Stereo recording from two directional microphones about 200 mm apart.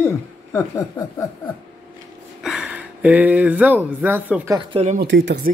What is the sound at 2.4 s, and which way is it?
Speech, 5° right (ahead or behind).